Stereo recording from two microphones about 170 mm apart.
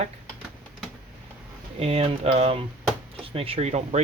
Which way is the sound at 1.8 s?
35° right (ahead or behind).